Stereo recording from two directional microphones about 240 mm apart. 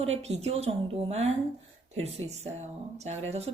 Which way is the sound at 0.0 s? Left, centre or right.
Right.